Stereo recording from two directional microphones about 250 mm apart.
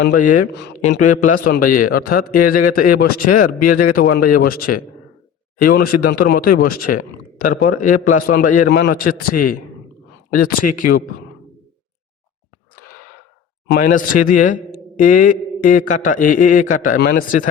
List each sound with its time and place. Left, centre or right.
0.0 s a man's voice: left
0.9 s a man's voice: left
10.3 s a man's voice: left
13.7 s a man's voice: left